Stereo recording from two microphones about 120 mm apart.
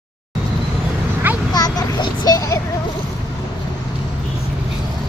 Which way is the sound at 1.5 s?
35° left (ahead or behind).